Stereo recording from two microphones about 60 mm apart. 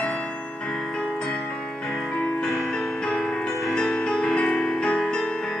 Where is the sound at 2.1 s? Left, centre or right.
Centre.